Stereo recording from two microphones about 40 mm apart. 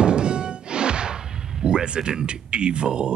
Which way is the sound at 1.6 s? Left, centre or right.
Right.